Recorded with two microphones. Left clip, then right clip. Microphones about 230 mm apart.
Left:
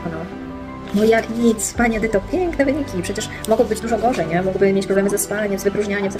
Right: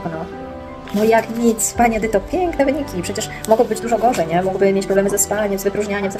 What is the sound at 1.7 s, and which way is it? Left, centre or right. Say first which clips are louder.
Speech: right 3 dB; centre.